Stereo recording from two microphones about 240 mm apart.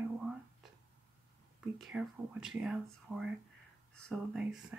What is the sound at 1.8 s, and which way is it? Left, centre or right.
Speech, centre.